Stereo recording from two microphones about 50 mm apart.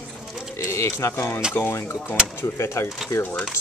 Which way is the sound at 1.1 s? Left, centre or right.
Left.